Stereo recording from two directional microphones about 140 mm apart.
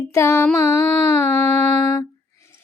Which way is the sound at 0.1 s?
20° left (ahead or behind).